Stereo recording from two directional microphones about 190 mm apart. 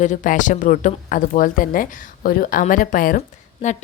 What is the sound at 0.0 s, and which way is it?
A woman's voice, 40° left (ahead or behind).